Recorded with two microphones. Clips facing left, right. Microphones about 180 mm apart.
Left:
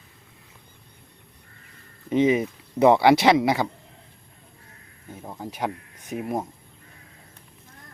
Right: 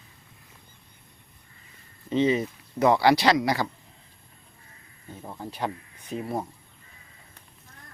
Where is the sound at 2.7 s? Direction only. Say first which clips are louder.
Left 4 dB; 25° left (ahead or behind).